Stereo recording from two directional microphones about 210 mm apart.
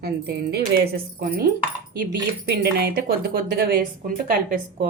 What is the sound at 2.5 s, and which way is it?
Speech, 50° right (ahead or behind).